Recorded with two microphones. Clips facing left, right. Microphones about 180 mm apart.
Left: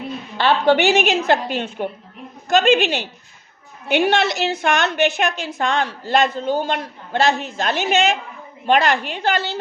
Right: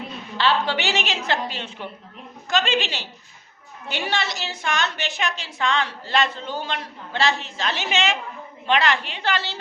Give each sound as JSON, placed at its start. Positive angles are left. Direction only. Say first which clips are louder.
{"t": 0.3, "sound": "a woman's voice", "louder": "left 7 dB", "side_deg": 50}